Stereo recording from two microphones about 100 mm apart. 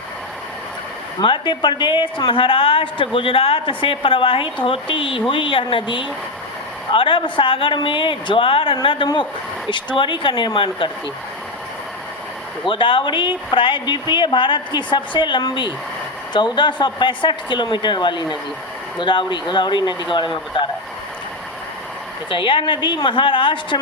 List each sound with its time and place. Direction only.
1.2 s a woman's voice: 55° left (ahead or behind)
12.6 s speech: 55° left (ahead or behind)
22.3 s a woman's voice: 60° left (ahead or behind)